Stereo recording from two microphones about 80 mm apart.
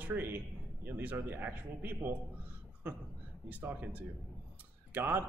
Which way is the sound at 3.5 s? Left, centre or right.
Right.